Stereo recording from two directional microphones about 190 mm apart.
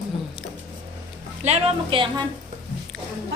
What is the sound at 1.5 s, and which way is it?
Speech, 30° right (ahead or behind).